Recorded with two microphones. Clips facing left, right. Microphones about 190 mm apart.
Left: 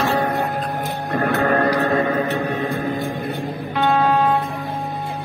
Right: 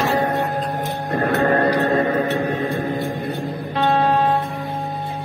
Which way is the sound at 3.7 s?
30° right (ahead or behind).